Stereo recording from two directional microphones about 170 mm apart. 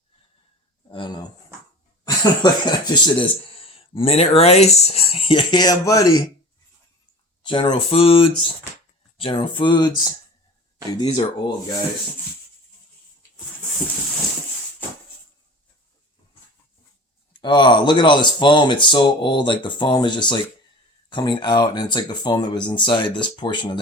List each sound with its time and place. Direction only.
0.9 s speech: 30° left (ahead or behind)
7.4 s speech: 30° left (ahead or behind)
11.0 s speech: 25° left (ahead or behind)
17.4 s speech: 25° left (ahead or behind)